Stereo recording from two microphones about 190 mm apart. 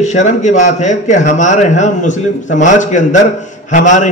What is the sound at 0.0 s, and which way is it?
A man's voice, 40° left (ahead or behind).